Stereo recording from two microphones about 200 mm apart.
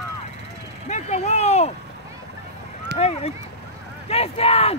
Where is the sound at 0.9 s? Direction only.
35° left (ahead or behind).